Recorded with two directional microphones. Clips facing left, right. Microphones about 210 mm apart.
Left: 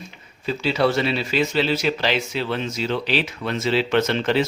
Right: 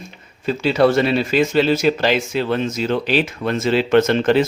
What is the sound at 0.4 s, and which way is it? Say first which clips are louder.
Speech: right 5 dB; 50° right (ahead or behind).